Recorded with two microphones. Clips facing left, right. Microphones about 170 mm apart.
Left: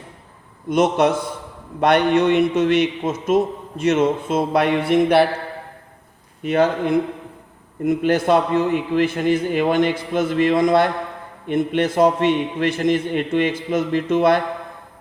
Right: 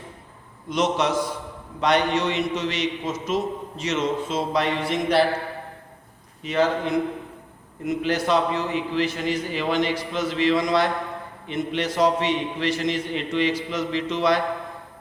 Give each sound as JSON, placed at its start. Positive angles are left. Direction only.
{"t": 0.7, "sound": "a man's voice", "side_deg": 55}
{"t": 6.4, "sound": "a man's voice", "side_deg": 55}